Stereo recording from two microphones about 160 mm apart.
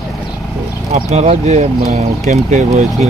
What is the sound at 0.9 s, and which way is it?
Speech, 40° right (ahead or behind).